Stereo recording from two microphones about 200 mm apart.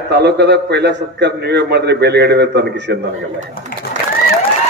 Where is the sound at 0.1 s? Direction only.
55° right (ahead or behind).